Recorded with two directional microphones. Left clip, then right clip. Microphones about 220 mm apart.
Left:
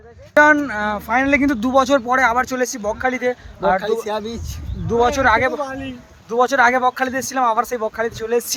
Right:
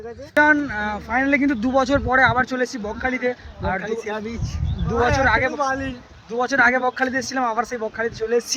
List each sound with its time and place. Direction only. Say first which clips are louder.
0.3 s speech: left 4 dB; 10° left (ahead or behind)
3.8 s speech: left 5 dB; 30° left (ahead or behind)
4.9 s speech: left 3 dB; 15° left (ahead or behind)